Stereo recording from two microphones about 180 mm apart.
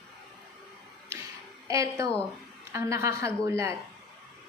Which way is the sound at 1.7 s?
15° right (ahead or behind).